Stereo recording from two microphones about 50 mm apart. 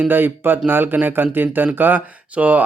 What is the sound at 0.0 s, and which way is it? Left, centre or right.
A man's voice, right.